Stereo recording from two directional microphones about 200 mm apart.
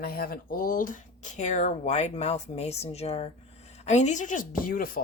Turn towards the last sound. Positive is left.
turn(degrees=45)  # may be behind; listen again after turning